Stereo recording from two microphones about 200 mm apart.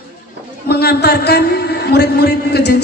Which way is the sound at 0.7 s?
55° left (ahead or behind).